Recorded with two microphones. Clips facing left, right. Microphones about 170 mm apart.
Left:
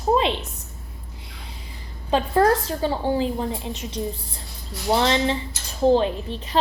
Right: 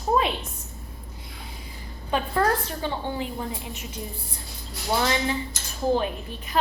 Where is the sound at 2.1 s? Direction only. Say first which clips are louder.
Left 5 dB; 35° left (ahead or behind).